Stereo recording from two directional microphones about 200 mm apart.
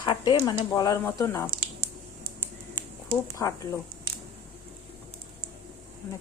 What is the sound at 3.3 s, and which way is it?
Speech, 15° left (ahead or behind).